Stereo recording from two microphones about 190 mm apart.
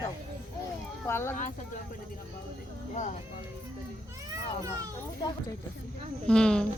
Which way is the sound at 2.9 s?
40° left (ahead or behind).